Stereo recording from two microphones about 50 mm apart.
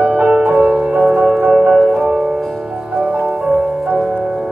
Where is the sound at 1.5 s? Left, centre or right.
Right.